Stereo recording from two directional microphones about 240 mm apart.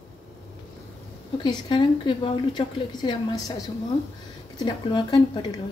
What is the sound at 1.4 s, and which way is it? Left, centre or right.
A woman's voice, centre.